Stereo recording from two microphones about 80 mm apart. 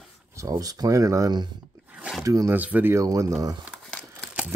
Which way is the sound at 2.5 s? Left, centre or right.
Right.